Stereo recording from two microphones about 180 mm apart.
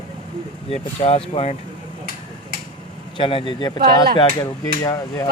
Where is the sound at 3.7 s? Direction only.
60° right (ahead or behind).